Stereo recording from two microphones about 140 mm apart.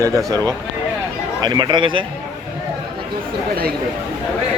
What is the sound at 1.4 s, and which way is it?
Speech, 30° right (ahead or behind).